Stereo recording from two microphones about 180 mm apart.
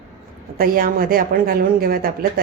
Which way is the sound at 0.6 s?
55° right (ahead or behind).